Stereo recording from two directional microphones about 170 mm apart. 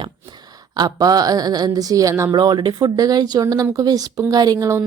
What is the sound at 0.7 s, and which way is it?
Speech, 25° right (ahead or behind).